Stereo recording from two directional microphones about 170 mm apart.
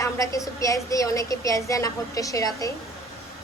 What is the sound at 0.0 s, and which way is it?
A woman's voice, 20° left (ahead or behind).